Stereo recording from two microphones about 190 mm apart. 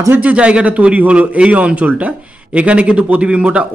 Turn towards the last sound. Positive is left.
turn(degrees=-5)  # may be behind; listen again after turning